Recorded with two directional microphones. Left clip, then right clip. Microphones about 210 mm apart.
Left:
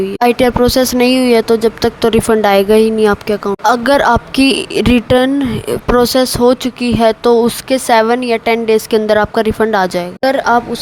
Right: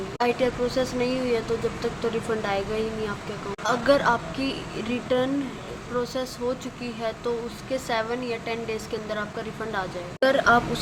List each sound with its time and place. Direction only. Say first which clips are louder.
0.2 s speech: left 13 dB; 50° left (ahead or behind)
10.2 s a woman's voice: left 7 dB; 35° left (ahead or behind)